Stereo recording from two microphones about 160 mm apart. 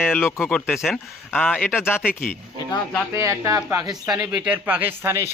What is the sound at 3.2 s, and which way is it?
Speech, 20° right (ahead or behind).